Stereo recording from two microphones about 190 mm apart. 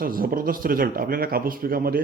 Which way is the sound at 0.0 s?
50° right (ahead or behind).